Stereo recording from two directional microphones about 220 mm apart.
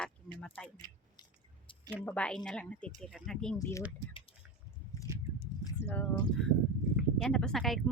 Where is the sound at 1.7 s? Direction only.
25° left (ahead or behind).